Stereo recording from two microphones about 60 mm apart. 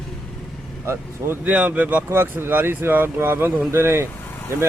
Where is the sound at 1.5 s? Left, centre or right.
Right.